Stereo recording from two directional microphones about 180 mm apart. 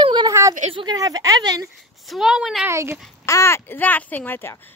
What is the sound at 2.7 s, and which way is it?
Speech, 15° right (ahead or behind).